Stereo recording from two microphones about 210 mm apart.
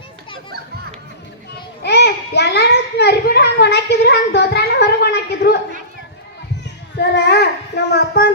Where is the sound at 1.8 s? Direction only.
50° left (ahead or behind).